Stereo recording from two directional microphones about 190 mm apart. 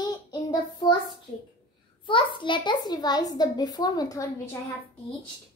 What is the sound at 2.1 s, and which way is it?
A woman's voice, 25° left (ahead or behind).